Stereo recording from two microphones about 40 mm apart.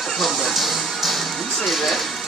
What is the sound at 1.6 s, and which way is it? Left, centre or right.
Speech, centre.